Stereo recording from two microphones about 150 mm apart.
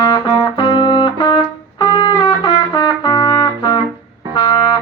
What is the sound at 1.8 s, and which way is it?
Trumpet, 30° left (ahead or behind).